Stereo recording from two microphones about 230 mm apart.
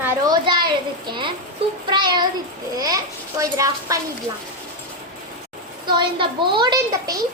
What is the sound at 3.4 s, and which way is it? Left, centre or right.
Speech, centre.